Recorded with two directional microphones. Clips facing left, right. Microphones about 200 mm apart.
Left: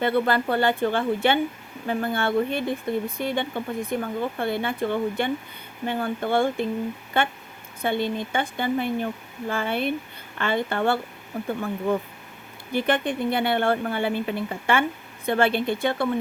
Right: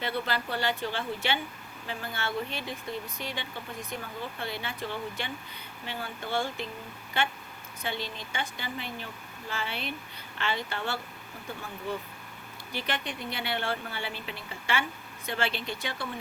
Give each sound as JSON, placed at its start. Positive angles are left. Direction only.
{"t": 0.0, "sound": "speech", "side_deg": 55}